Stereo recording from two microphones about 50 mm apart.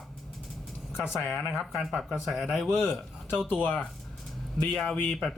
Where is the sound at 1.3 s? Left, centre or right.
Centre.